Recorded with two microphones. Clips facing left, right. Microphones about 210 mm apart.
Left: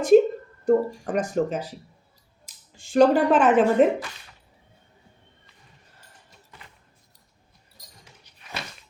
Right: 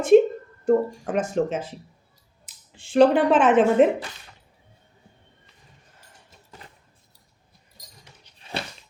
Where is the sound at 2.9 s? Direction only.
Centre (ahead or behind).